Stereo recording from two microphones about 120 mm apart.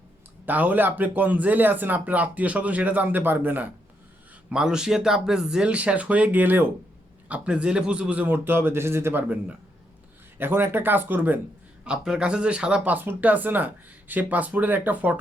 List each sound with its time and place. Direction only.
0.4 s speech: 15° right (ahead or behind)
4.4 s speech: 5° right (ahead or behind)